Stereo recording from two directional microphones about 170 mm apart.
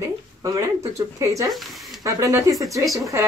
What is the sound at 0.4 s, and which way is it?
A woman's voice, 20° right (ahead or behind).